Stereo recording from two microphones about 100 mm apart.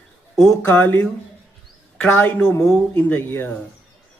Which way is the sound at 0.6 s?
20° left (ahead or behind).